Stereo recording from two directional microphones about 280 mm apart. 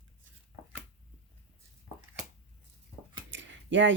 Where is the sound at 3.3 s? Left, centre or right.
Right.